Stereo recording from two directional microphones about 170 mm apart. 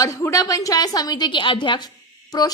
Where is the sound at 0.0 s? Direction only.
20° left (ahead or behind).